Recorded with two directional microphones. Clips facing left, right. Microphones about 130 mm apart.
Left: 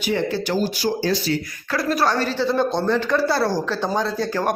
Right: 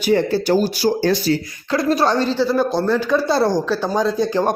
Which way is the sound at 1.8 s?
25° right (ahead or behind).